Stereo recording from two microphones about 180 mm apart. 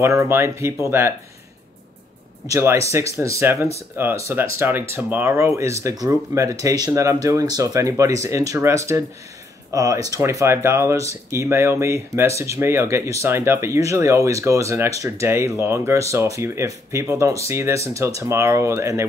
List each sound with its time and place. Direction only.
0.0 s speech: 15° right (ahead or behind)
2.5 s speech: 15° right (ahead or behind)